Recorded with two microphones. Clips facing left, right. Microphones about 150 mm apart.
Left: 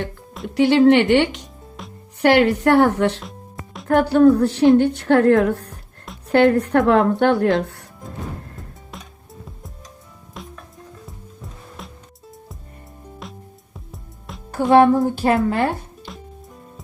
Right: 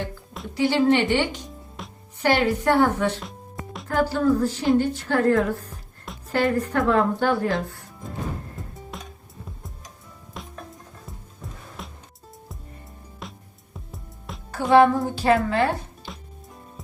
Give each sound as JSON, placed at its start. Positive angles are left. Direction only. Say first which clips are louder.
{"t": 0.4, "sound": "a woman's voice", "louder": "left 7 dB", "side_deg": 70}
{"t": 1.8, "sound": "music", "louder": "left 2 dB", "side_deg": 0}
{"t": 2.2, "sound": "a woman's voice", "louder": "left 6 dB", "side_deg": 70}
{"t": 3.2, "sound": "music", "louder": "even", "side_deg": 0}
{"t": 3.8, "sound": "a woman's voice", "louder": "left 8 dB", "side_deg": 65}
{"t": 8.9, "sound": "music", "louder": "even", "side_deg": 0}
{"t": 10.4, "sound": "music", "louder": "left 2 dB", "side_deg": 0}
{"t": 11.8, "sound": "music", "louder": "left 1 dB", "side_deg": 0}
{"t": 13.2, "sound": "music", "louder": "left 3 dB", "side_deg": 0}
{"t": 14.7, "sound": "music", "louder": "left 3 dB", "side_deg": 50}
{"t": 16.1, "sound": "music", "louder": "left 3 dB", "side_deg": 0}